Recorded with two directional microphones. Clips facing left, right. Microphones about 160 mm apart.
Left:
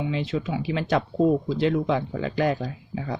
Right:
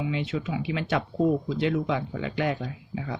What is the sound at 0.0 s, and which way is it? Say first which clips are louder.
Speech: left 2 dB; 35° left (ahead or behind).